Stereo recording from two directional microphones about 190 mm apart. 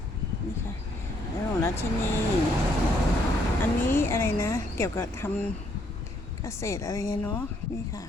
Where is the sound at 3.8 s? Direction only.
10° left (ahead or behind).